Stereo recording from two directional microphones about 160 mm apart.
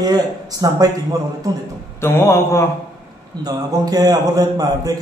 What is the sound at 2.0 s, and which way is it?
Speech, 15° left (ahead or behind).